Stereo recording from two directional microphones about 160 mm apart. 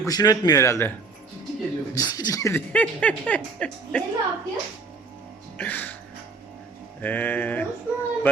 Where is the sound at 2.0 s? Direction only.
25° left (ahead or behind).